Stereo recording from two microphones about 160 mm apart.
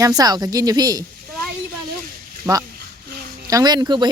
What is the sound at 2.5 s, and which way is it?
A woman's voice, 20° right (ahead or behind).